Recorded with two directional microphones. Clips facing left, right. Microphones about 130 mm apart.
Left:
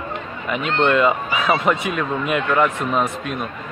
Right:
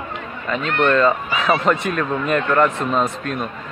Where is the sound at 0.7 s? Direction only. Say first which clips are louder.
Even; 25° left (ahead or behind).